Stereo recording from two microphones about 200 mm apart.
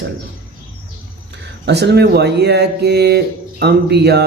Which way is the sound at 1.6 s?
60° right (ahead or behind).